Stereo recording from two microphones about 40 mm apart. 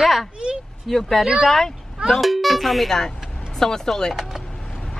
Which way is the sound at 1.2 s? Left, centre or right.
Centre.